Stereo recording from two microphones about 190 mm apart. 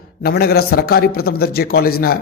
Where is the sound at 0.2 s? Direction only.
55° left (ahead or behind).